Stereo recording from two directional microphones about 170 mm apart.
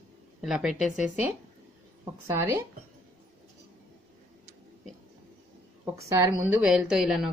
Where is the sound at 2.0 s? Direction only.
15° right (ahead or behind).